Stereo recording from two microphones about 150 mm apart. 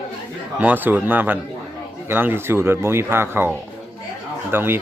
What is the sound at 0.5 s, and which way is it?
A man's voice, 10° right (ahead or behind).